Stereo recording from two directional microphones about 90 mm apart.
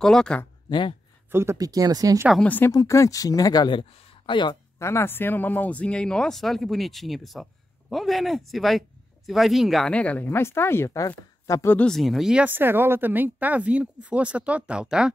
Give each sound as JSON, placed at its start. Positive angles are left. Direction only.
{"t": 0.0, "sound": "speech", "side_deg": 5}
{"t": 0.7, "sound": "speech", "side_deg": 55}
{"t": 1.3, "sound": "speech", "side_deg": -30}
{"t": 1.6, "sound": "speech", "side_deg": -40}
{"t": 2.4, "sound": "speech", "side_deg": 20}
{"t": 2.7, "sound": "speech", "side_deg": 40}
{"t": 3.7, "sound": "speech", "side_deg": 65}
{"t": 4.7, "sound": "speech", "side_deg": 30}
{"t": 9.8, "sound": "speech", "side_deg": 15}
{"t": 10.9, "sound": "speech", "side_deg": 40}
{"t": 11.9, "sound": "speech", "side_deg": 0}
{"t": 12.4, "sound": "speech", "side_deg": -25}